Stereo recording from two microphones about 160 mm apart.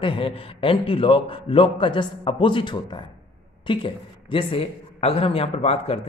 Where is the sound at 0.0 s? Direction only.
35° left (ahead or behind).